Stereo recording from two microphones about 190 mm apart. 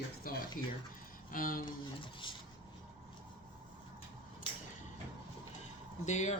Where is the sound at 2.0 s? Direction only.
25° left (ahead or behind).